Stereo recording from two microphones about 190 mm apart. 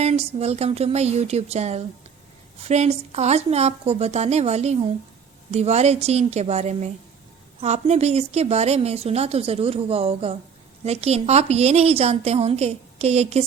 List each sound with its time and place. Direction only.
0.0 s a woman's voice: 35° right (ahead or behind)